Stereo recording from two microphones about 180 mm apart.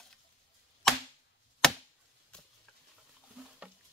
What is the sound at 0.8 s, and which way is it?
Arrow, centre (ahead or behind).